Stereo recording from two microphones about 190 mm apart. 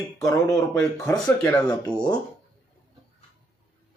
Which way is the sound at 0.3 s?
15° left (ahead or behind).